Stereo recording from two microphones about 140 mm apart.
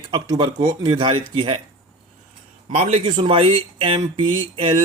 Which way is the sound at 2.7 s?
55° right (ahead or behind).